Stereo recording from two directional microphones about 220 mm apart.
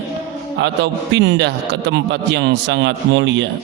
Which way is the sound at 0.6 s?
55° right (ahead or behind).